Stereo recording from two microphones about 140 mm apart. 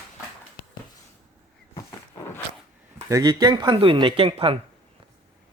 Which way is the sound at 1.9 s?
20° left (ahead or behind).